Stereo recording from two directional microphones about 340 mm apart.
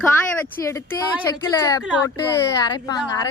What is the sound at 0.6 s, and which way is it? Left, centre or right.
Speech, centre.